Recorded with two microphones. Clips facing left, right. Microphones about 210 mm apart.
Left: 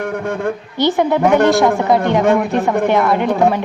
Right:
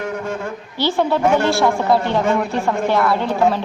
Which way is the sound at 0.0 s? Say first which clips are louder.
Left 5 dB; 55° left (ahead or behind).